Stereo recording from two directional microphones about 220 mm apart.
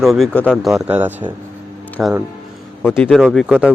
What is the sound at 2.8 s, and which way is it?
Speech, 5° left (ahead or behind).